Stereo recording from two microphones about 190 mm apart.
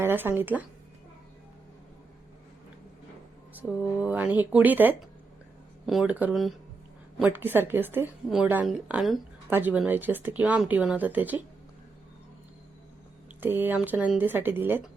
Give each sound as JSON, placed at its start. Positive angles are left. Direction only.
{"t": 0.0, "sound": "speech", "side_deg": -10}
{"t": 3.5, "sound": "a woman's voice", "side_deg": -10}
{"t": 13.4, "sound": "a woman's voice", "side_deg": -10}